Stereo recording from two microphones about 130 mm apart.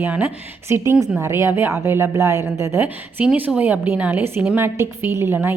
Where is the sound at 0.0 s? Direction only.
15° right (ahead or behind).